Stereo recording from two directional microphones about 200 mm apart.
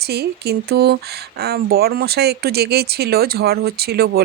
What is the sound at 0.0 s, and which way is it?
Speech, 55° right (ahead or behind).